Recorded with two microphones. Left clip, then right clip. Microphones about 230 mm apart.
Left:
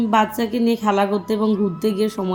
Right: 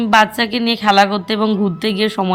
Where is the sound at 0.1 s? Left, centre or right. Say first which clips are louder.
Right 7 dB; centre.